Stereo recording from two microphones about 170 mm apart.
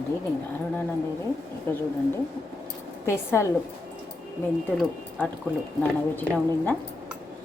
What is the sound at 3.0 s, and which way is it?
Speech, 15° left (ahead or behind).